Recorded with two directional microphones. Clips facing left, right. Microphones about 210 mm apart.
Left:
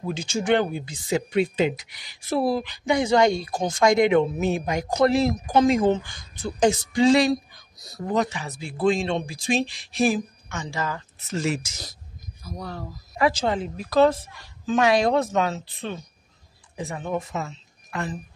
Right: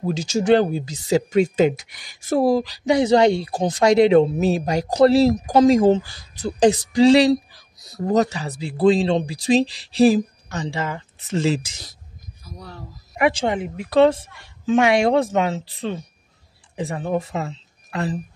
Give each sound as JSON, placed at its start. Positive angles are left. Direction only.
{"t": 0.0, "sound": "speech", "side_deg": -40}
{"t": 12.4, "sound": "speech", "side_deg": 45}
{"t": 13.2, "sound": "a woman's voice", "side_deg": -25}